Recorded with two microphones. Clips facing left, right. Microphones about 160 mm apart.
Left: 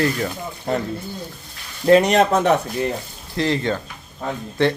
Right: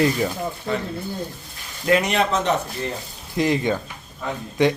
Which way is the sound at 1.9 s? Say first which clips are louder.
Left 6 dB; 35° left (ahead or behind).